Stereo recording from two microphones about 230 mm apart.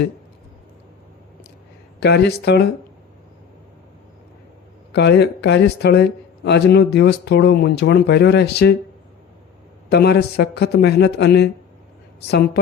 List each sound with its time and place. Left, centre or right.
2.0 s speech: left
4.9 s speech: left
9.9 s speech: left